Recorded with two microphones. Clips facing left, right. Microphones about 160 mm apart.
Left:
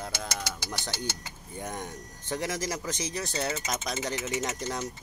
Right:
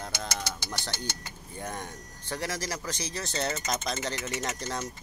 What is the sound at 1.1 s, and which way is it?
Speech, 15° left (ahead or behind).